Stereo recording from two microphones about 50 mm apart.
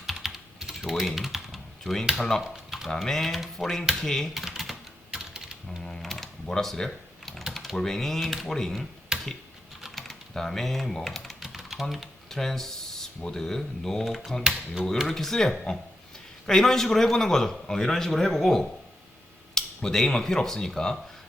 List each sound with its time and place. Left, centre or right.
0.0 s typing: centre
2.1 s a man's voice: centre
2.4 s typing: centre
2.9 s a man's voice: centre
4.4 s typing: centre
5.3 s typing: centre
5.8 s ratchet: centre
6.4 s computer keyboard: centre
7.5 s a man's voice: centre
9.8 s typing: centre
13.2 s a man's voice: centre